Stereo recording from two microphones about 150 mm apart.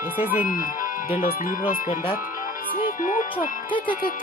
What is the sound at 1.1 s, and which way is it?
Speech, 65° left (ahead or behind).